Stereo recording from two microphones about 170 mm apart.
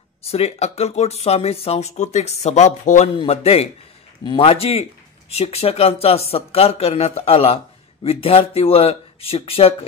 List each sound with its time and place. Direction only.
0.2 s speech: 35° left (ahead or behind)